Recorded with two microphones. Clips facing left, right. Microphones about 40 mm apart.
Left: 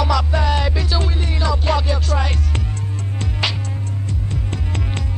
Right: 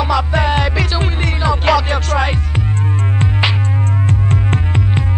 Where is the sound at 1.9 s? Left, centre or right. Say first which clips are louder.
Right 5 dB; right.